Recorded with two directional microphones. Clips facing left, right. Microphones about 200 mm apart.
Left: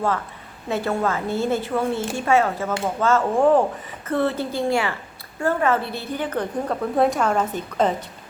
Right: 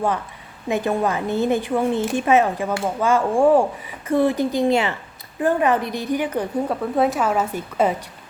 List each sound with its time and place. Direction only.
0.7 s a woman's voice: 15° right (ahead or behind)